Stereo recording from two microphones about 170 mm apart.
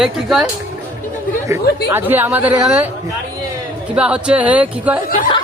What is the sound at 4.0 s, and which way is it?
Speech, 5° right (ahead or behind).